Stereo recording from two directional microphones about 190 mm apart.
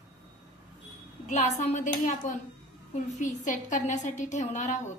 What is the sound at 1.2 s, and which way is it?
A woman's voice, 40° left (ahead or behind).